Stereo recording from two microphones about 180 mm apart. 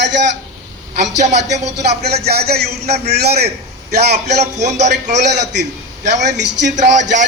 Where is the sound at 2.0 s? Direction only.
65° right (ahead or behind).